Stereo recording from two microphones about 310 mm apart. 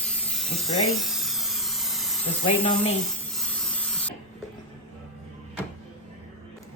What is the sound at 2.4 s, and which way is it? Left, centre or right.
Speech, centre.